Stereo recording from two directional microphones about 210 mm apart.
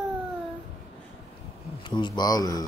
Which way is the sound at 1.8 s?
20° left (ahead or behind).